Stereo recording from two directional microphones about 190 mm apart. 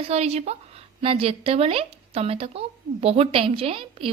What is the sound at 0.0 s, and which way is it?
A woman's voice, 35° right (ahead or behind).